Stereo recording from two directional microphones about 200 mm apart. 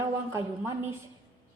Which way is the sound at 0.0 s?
15° right (ahead or behind).